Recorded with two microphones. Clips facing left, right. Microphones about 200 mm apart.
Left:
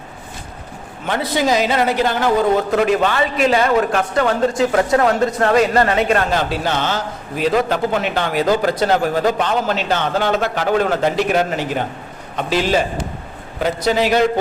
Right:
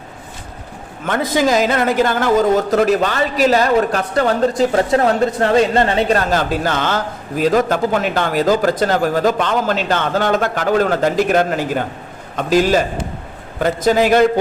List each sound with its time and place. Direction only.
1.0 s speech: 45° right (ahead or behind)